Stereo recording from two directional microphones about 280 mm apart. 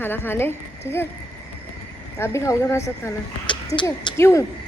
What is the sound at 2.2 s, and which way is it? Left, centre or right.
A woman's voice, centre.